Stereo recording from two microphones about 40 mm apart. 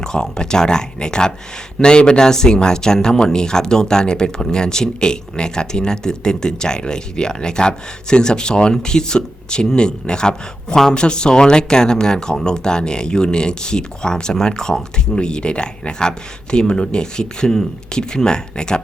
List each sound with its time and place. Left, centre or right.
0.0 s speech: centre